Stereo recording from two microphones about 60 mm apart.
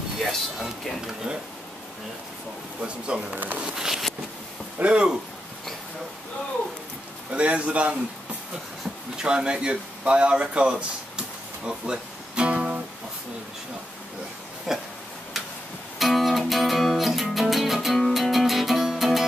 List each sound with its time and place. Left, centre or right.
0.3 s speech: centre
2.8 s speech: centre
3.3 s speech: right
3.6 s speech: centre
7.2 s a man's voice: right
8.8 s a sound: centre
14.7 s a sound: centre
16.0 s music: centre